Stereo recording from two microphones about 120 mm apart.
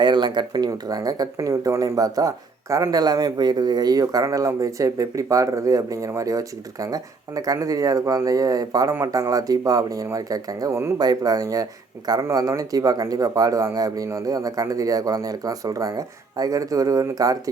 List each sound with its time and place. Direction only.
0.0 s speech: 40° right (ahead or behind); by 10.9 s 25° right (ahead or behind)
10.9 s speech: 35° right (ahead or behind)